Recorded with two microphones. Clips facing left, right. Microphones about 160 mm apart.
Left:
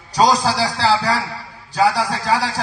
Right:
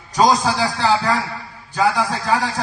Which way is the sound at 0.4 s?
35° left (ahead or behind).